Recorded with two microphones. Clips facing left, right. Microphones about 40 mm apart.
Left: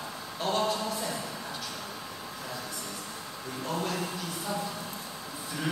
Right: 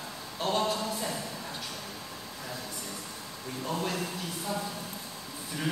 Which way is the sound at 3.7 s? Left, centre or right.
Centre.